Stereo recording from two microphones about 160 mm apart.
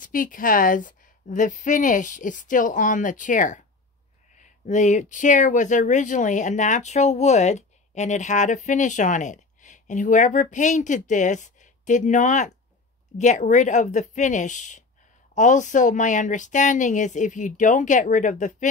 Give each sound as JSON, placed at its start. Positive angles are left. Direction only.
{"t": 0.0, "sound": "a woman's voice", "side_deg": 55}